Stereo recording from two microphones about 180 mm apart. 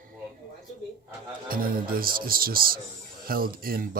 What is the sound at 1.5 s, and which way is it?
A man's voice, 55° right (ahead or behind).